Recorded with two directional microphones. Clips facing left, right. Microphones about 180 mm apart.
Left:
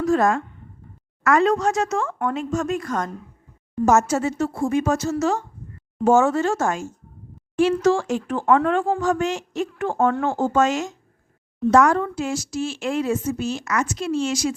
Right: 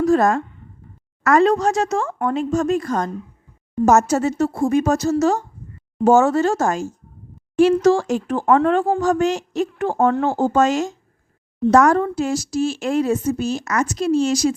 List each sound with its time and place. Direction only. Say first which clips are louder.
0.0 s speech: right 3 dB; 40° right (ahead or behind)